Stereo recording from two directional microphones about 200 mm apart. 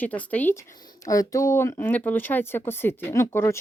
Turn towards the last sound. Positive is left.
turn(degrees=15)  # may be behind; listen again after turning